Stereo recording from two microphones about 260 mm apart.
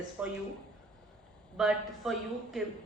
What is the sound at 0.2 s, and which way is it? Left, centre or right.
Speech, centre.